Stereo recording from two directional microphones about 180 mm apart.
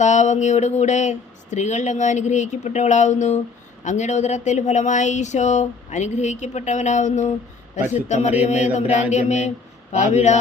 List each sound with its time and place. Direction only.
0.0 s speech: 40° left (ahead or behind)